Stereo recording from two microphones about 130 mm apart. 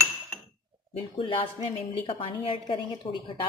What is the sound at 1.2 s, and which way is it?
A woman's voice, 40° left (ahead or behind).